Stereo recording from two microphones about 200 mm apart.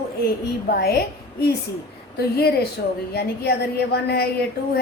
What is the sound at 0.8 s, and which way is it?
A woman's voice, 50° left (ahead or behind).